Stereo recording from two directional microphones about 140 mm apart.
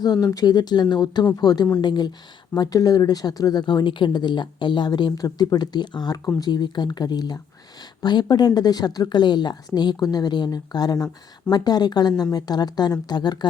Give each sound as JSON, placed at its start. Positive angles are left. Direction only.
{"t": 0.0, "sound": "speech", "side_deg": 30}